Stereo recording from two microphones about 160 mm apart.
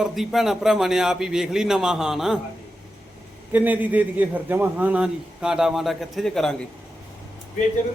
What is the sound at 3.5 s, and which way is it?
A man's voice, 10° right (ahead or behind).